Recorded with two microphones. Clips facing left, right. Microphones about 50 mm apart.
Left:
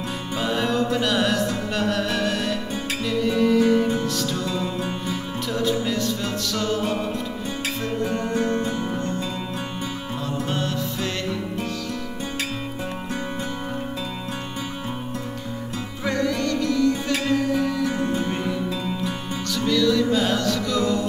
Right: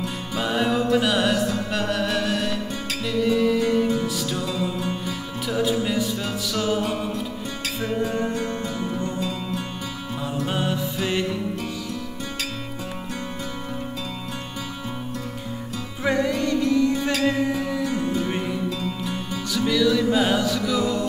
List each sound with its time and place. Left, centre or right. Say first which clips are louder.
0.4 s music: right 1 dB; centre
6.5 s music: right 1 dB; centre
10.5 s music: right 1 dB; centre
16.0 s music: right 2 dB; centre
19.5 s music: even; centre